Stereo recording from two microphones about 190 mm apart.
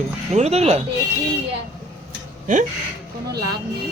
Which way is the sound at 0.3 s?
35° right (ahead or behind).